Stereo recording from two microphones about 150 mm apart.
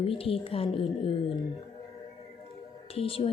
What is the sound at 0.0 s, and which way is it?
Speech, 40° left (ahead or behind).